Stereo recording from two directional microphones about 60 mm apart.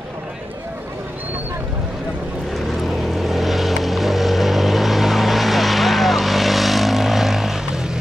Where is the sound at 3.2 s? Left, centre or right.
Centre.